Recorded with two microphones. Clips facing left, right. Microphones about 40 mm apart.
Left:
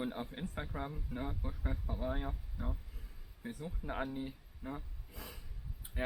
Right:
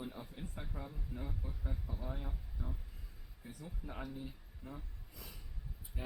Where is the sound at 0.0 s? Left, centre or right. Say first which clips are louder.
Left 6 dB; left.